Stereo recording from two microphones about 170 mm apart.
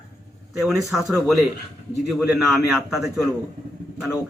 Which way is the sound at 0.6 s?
Centre (ahead or behind).